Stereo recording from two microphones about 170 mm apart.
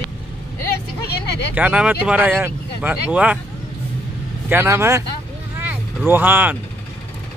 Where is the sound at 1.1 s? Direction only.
75° left (ahead or behind).